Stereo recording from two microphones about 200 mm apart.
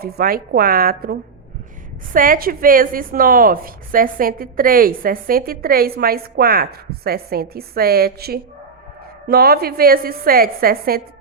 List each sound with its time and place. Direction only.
0.0 s a woman's voice: 50° right (ahead or behind)